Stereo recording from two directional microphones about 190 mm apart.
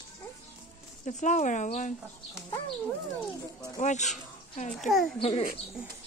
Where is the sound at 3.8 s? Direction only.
40° left (ahead or behind).